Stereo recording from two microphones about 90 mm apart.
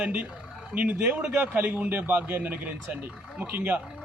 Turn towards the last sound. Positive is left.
turn(degrees=-20)  # may be behind; listen again after turning